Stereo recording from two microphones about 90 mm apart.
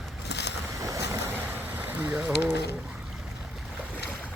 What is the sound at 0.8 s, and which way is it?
Vehicle, 40° right (ahead or behind).